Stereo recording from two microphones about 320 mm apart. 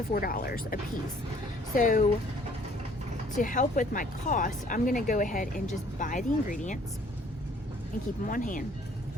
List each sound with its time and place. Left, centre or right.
0.1 s speech: left
3.3 s speech: left
8.2 s speech: left